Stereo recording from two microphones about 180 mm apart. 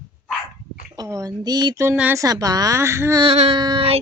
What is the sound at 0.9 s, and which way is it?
A woman's voice, 20° right (ahead or behind).